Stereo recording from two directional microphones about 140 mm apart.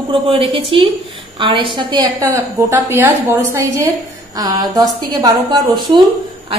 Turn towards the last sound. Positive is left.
turn(degrees=-30)  # may be behind; listen again after turning